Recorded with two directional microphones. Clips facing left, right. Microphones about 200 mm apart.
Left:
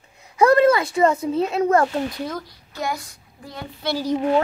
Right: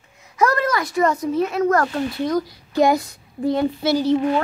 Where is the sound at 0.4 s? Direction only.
30° left (ahead or behind).